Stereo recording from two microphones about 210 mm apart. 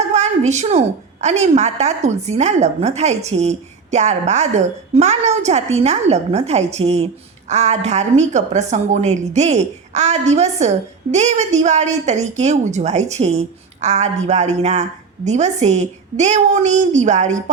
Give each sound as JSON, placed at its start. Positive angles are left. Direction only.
{"t": 0.1, "sound": "a woman's voice", "side_deg": -35}